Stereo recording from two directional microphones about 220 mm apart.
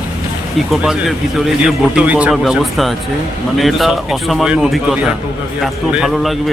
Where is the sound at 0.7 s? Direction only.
Centre (ahead or behind).